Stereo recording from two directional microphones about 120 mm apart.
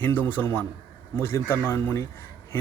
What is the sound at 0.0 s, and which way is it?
A man's voice, 15° left (ahead or behind).